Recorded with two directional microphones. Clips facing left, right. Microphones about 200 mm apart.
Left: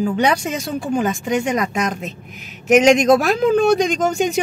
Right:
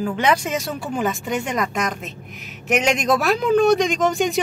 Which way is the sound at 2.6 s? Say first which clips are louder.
Left 8 dB; 40° left (ahead or behind).